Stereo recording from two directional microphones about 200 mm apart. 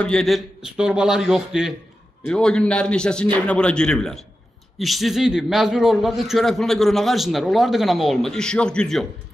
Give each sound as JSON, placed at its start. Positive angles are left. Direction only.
{"t": 0.0, "sound": "a man's voice", "side_deg": 0}